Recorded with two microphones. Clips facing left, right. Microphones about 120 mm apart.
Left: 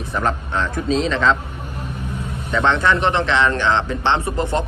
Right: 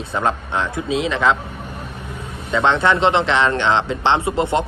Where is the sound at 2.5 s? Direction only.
20° right (ahead or behind).